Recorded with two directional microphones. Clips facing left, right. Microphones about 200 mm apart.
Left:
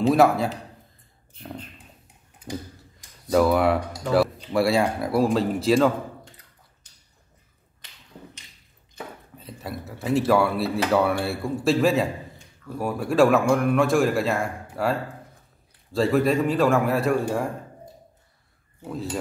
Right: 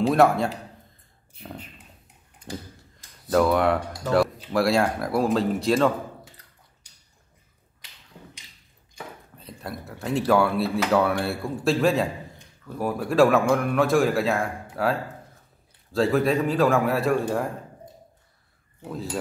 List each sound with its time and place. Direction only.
0.0 s a man's voice: centre (ahead or behind)
3.3 s a man's voice: centre (ahead or behind)
6.8 s a sound: 10° right (ahead or behind)
8.9 s a man's voice: centre (ahead or behind)
18.8 s a man's voice: centre (ahead or behind)